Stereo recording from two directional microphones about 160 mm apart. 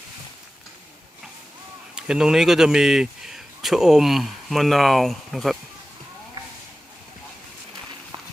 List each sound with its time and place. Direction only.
2.0 s speech: 5° right (ahead or behind)